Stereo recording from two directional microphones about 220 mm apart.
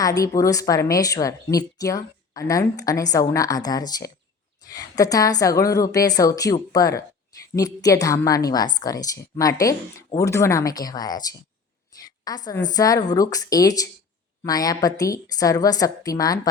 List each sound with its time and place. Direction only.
0.0 s a woman's voice: 15° left (ahead or behind)
11.9 s a sound: 15° left (ahead or behind)
12.6 s a woman's voice: 15° left (ahead or behind)